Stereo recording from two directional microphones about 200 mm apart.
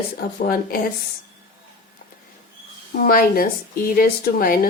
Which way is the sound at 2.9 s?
45° left (ahead or behind).